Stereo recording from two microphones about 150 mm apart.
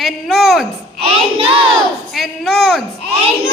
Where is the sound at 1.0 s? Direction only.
40° right (ahead or behind).